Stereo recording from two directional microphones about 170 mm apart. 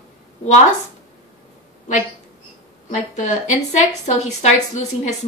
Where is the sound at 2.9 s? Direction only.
45° left (ahead or behind).